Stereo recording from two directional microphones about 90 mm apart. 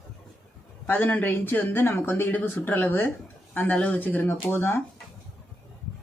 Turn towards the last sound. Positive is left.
turn(degrees=25)  # may be behind; listen again after turning